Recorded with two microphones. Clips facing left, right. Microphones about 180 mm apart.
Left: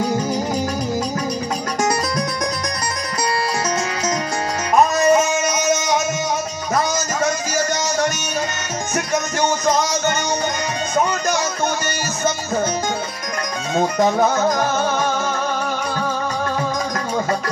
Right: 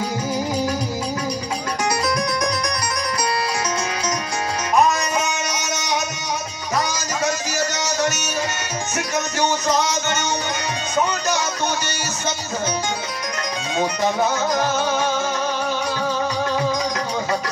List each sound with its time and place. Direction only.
4.9 s music: 45° left (ahead or behind)
13.7 s music: 50° left (ahead or behind)